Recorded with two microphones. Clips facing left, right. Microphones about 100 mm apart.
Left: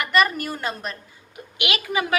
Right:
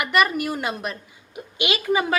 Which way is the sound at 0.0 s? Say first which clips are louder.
Even; 5° right (ahead or behind).